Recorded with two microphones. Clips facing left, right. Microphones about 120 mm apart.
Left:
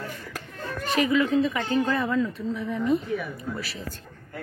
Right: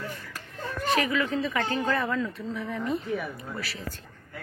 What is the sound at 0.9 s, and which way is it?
A woman's voice, 20° left (ahead or behind).